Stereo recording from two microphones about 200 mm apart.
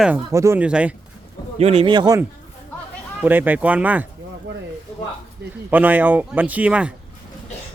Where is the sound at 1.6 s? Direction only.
30° right (ahead or behind); by 4.1 s 5° right (ahead or behind).